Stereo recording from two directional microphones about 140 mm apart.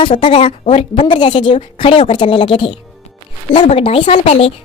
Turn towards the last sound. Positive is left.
turn(degrees=45)  # may be behind; listen again after turning